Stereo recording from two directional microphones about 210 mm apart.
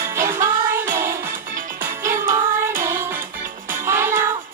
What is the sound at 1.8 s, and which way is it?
Music, 10° right (ahead or behind).